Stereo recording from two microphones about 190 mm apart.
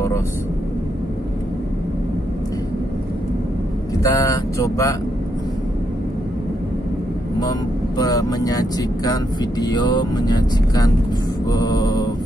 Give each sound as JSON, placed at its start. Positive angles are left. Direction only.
{"t": 4.0, "sound": "speech", "side_deg": 20}
{"t": 8.0, "sound": "speech", "side_deg": 20}
{"t": 11.5, "sound": "mantra", "side_deg": 20}